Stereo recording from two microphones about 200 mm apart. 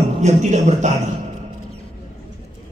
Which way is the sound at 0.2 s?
35° right (ahead or behind).